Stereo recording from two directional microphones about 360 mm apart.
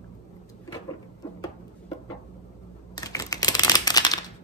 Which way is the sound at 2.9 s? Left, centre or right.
Centre.